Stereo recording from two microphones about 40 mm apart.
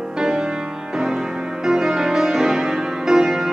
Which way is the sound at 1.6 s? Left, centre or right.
Centre.